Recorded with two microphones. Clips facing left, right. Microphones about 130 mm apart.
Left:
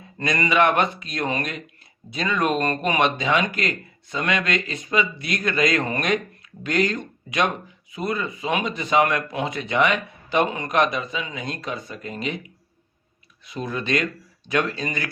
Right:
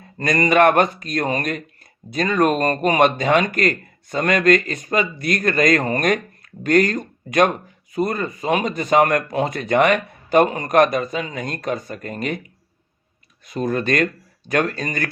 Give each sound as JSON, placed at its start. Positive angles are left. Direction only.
{"t": 0.2, "sound": "speech", "side_deg": -40}
{"t": 13.5, "sound": "speech", "side_deg": -45}